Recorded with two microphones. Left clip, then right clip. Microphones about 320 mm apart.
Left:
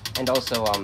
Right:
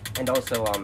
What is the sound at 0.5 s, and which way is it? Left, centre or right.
Speech, left.